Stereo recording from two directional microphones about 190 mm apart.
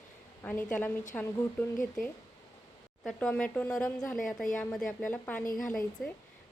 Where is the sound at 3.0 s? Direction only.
5° left (ahead or behind).